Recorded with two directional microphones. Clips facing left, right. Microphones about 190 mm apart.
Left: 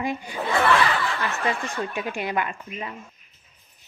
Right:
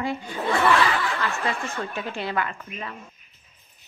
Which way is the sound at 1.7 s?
15° left (ahead or behind).